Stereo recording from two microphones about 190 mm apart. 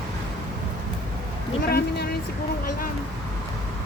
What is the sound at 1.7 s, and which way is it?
Speech, 55° left (ahead or behind).